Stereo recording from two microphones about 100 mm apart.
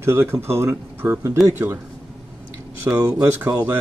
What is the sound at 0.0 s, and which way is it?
Speech, 25° right (ahead or behind).